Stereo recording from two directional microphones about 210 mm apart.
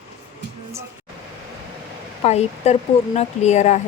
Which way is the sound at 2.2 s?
30° left (ahead or behind).